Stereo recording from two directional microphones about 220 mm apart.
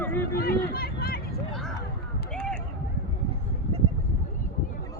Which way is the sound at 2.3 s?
5° left (ahead or behind).